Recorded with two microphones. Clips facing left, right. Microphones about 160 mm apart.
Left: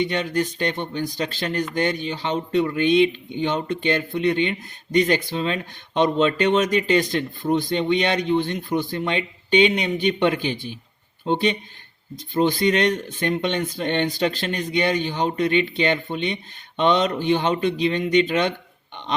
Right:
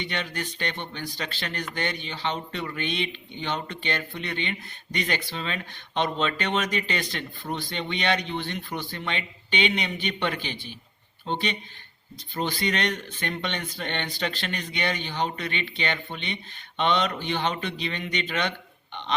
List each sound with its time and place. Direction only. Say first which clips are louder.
0.0 s speech: left 9 dB; 45° left (ahead or behind)